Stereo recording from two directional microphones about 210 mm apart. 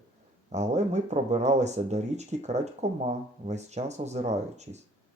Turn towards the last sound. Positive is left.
turn(degrees=-30)  # may be behind; listen again after turning